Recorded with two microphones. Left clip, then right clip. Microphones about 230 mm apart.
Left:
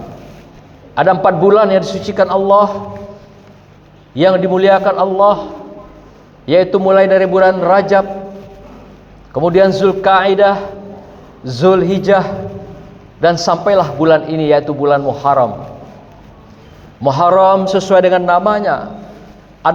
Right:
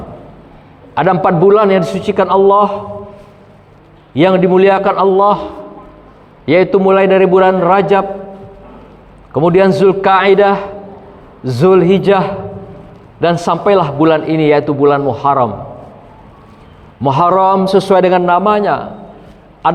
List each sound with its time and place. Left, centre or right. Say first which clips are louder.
0.9 s a man's voice: even; right
4.1 s a man's voice: right 1 dB; right
9.3 s a man's voice: right 1 dB; right
17.0 s a man's voice: left 1 dB; right